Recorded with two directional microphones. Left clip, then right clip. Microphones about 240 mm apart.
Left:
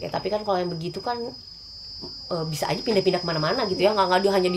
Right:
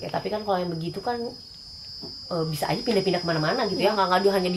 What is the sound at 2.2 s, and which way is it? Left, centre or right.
Speech, left.